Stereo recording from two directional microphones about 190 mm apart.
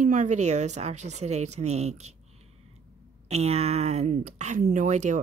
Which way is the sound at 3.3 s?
35° right (ahead or behind).